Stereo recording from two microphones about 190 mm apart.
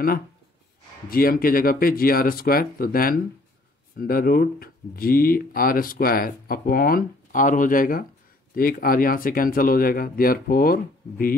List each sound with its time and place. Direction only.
1.1 s speech: 50° left (ahead or behind)